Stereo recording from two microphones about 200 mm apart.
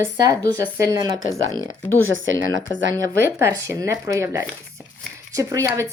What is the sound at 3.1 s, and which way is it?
A woman's voice, 15° right (ahead or behind).